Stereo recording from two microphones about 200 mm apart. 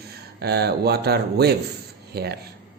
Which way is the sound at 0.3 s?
55° right (ahead or behind).